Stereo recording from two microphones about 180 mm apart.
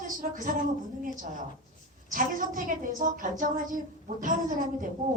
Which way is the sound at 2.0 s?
50° right (ahead or behind).